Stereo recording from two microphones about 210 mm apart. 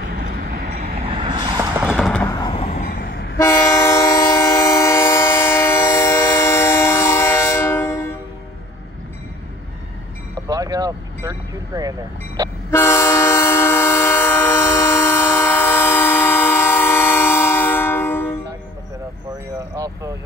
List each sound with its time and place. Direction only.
0.0 s train: 40° right (ahead or behind)
0.7 s vehicle: 20° right (ahead or behind)
1.9 s a sound: 5° left (ahead or behind)
2.3 s vehicle: 20° left (ahead or behind)
2.7 s a sound: 40° left (ahead or behind)
3.3 s train: 15° left (ahead or behind)
10.4 s vehicle: 15° right (ahead or behind)
12.7 s train: 10° left (ahead or behind)
19.7 s vehicle: 15° right (ahead or behind)